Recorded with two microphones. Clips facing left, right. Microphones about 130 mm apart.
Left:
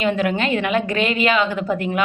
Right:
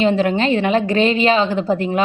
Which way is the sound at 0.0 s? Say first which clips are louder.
Right 4 dB; 30° right (ahead or behind).